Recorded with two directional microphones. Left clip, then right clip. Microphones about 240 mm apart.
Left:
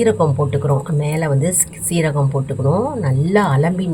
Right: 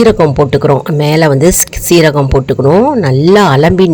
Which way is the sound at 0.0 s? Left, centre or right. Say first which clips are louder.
Right 9 dB; right.